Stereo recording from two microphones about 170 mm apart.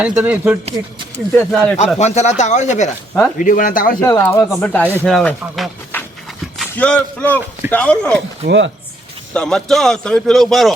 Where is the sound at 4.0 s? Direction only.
15° left (ahead or behind); by 5.7 s centre (ahead or behind).